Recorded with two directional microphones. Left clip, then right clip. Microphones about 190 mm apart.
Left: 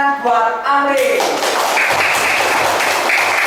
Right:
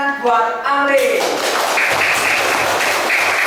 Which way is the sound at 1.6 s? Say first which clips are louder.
Left 1 dB; 20° right (ahead or behind).